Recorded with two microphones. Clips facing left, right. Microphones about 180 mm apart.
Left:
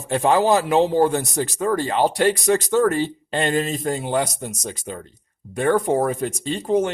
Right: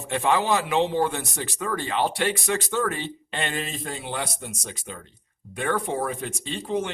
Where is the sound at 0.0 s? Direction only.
40° left (ahead or behind).